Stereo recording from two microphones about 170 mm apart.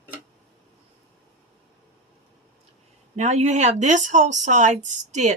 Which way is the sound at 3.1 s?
40° right (ahead or behind).